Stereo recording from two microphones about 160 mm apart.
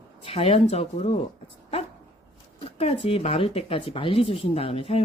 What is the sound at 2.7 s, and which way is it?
Speech, 35° left (ahead or behind).